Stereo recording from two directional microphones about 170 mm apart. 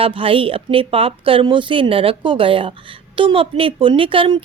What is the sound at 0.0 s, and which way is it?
A woman's voice, 30° right (ahead or behind).